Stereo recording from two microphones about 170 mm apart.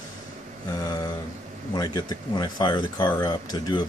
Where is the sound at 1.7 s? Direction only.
25° left (ahead or behind).